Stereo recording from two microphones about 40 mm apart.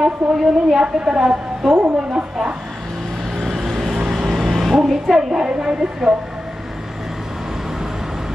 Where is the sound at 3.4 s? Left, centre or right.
Centre.